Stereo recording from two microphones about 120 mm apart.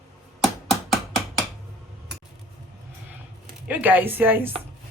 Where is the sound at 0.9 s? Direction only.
Centre (ahead or behind).